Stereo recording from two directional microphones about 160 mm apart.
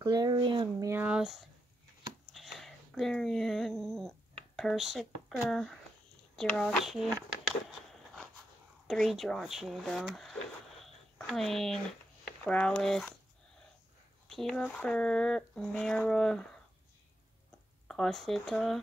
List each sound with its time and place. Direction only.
0.0 s speech: 25° right (ahead or behind)
0.8 s speech: 10° right (ahead or behind)
7.9 s a sound: centre (ahead or behind)
8.8 s speech: centre (ahead or behind)
10.8 s a sound: centre (ahead or behind)
12.4 s speech: 5° left (ahead or behind)
14.2 s speech: centre (ahead or behind)
17.8 s speech: 5° left (ahead or behind)